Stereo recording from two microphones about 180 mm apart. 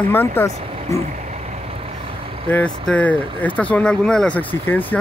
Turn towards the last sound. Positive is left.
turn(degrees=10)  # may be behind; listen again after turning